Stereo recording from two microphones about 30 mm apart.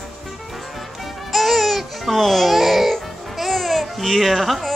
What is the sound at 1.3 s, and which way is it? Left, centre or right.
Music, centre.